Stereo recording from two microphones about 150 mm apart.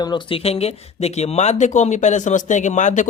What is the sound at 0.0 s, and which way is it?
Speech, 35° left (ahead or behind).